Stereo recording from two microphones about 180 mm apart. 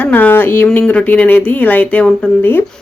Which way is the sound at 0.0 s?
10° left (ahead or behind).